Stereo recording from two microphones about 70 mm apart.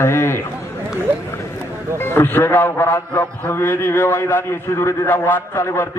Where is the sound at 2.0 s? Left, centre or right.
Left.